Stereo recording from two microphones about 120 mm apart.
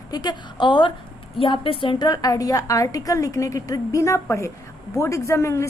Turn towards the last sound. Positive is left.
turn(degrees=25)  # may be behind; listen again after turning